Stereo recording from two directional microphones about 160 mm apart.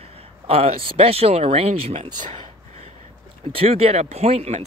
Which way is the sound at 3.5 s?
35° right (ahead or behind).